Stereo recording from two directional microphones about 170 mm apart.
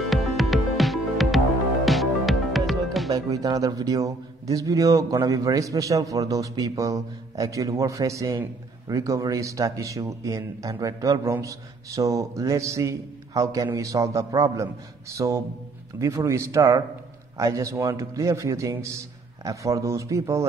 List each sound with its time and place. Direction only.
0.0 s music: centre (ahead or behind)
3.1 s a man's voice: 20° right (ahead or behind)